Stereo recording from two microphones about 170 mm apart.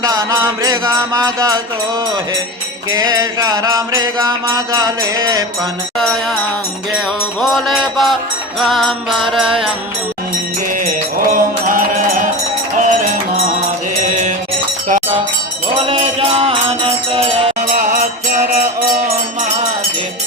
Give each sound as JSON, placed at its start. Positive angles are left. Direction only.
{"t": 0.0, "sound": "music", "side_deg": -20}
{"t": 2.9, "sound": "mantra", "side_deg": -25}
{"t": 6.0, "sound": "music", "side_deg": 0}
{"t": 7.4, "sound": "music", "side_deg": 0}
{"t": 10.8, "sound": "mantra", "side_deg": -55}
{"t": 12.8, "sound": "music", "side_deg": -50}
{"t": 16.4, "sound": "music", "side_deg": -35}